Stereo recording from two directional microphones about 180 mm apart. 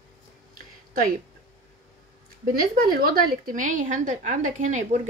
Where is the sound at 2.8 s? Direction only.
55° right (ahead or behind).